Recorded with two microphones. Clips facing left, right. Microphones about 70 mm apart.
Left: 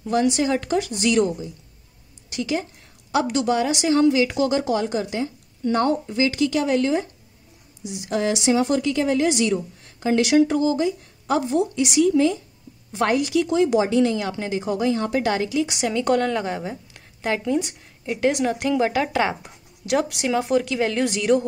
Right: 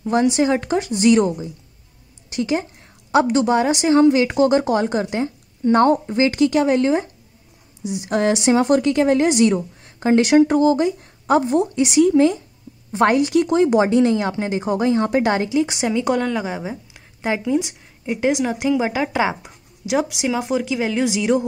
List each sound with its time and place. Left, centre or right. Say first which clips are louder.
0.0 s a woman's voice: right 3 dB; right
15.9 s a woman's voice: left 1 dB; centre
16.2 s a woman's voice: right 1 dB; centre